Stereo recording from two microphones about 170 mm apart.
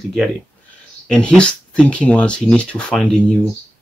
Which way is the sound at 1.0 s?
5° left (ahead or behind).